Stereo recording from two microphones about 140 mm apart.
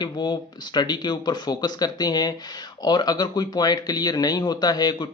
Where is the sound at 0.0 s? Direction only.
30° left (ahead or behind).